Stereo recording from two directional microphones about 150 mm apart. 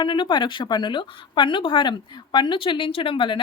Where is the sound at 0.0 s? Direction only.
30° left (ahead or behind).